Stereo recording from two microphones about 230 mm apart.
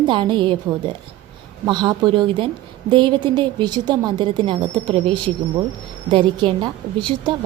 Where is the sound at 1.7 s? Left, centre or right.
Centre.